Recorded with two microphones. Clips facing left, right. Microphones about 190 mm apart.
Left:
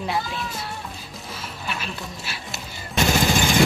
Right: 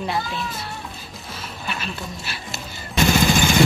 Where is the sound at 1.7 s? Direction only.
5° left (ahead or behind).